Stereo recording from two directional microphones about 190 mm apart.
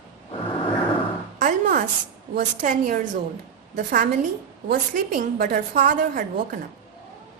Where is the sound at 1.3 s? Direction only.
45° right (ahead or behind).